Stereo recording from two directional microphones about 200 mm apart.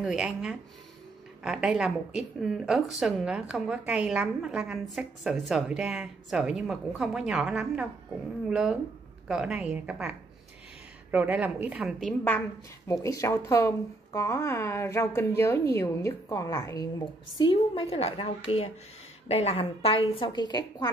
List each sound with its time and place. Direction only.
0.0 s a woman's voice: centre (ahead or behind)
12.8 s a woman's voice: 15° left (ahead or behind)